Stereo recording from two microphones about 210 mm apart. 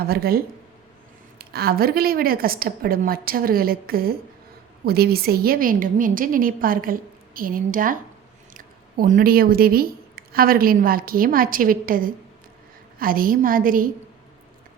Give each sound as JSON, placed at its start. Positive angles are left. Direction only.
{"t": 0.0, "sound": "a woman's voice", "side_deg": -45}